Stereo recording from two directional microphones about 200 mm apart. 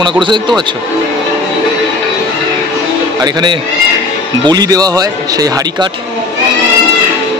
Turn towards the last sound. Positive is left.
turn(degrees=-20)  # may be behind; listen again after turning